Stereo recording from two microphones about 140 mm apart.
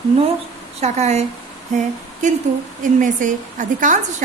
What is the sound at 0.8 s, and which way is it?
Speech, 50° right (ahead or behind).